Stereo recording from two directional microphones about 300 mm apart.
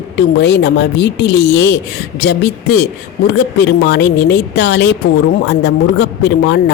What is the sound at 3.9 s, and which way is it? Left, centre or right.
Speech, left.